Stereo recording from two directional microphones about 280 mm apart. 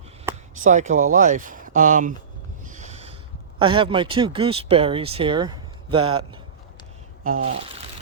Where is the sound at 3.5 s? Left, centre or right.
Centre.